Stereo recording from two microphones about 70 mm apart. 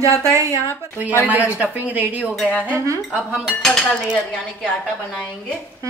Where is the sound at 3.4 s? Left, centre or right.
Centre.